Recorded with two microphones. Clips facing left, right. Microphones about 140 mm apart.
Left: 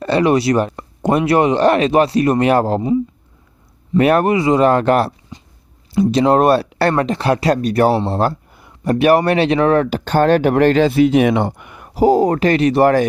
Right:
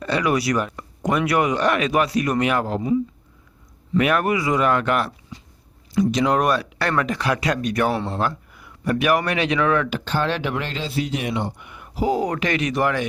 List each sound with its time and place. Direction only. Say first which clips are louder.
0.0 s speech: left 7 dB; 30° left (ahead or behind)